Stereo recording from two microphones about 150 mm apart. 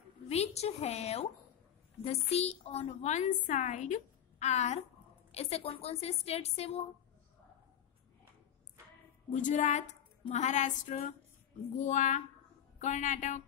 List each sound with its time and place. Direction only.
0.3 s a woman's voice: 45° left (ahead or behind)
9.3 s a woman's voice: 55° left (ahead or behind)